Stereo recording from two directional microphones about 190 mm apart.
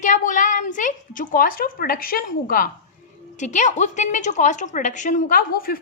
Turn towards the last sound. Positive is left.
turn(degrees=50)  # may be behind; listen again after turning